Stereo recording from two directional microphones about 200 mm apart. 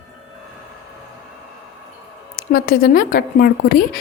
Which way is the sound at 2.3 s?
45° left (ahead or behind).